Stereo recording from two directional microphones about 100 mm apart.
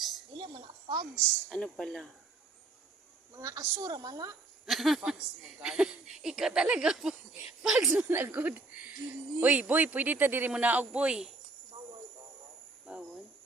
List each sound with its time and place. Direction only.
0.3 s a woman's voice: 50° right (ahead or behind)
1.5 s speech: 10° left (ahead or behind)
3.3 s a woman's voice: 30° right (ahead or behind)
4.6 s speech: centre (ahead or behind)
7.9 s speech: 15° right (ahead or behind)
12.8 s cricket: 10° right (ahead or behind)